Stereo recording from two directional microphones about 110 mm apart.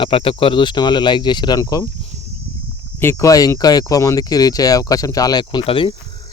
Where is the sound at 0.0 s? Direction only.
55° left (ahead or behind); by 1.8 s 35° left (ahead or behind).